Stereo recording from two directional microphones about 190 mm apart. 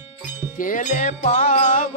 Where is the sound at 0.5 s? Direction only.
45° left (ahead or behind).